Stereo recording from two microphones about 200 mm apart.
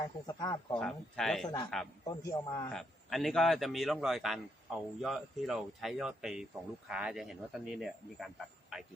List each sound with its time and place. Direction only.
0.3 s a man's voice: 20° left (ahead or behind)
0.8 s a man's voice: centre (ahead or behind)
2.0 s a man's voice: 20° left (ahead or behind)
2.7 s a man's voice: centre (ahead or behind)